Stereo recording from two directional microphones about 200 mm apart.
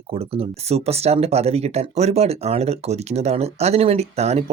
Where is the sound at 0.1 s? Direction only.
30° right (ahead or behind).